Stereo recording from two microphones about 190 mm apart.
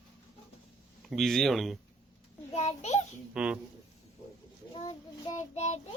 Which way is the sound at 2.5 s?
35° left (ahead or behind).